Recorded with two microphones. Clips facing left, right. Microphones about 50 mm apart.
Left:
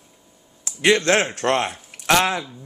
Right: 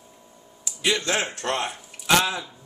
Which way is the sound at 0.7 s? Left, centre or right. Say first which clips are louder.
Left 7 dB; left.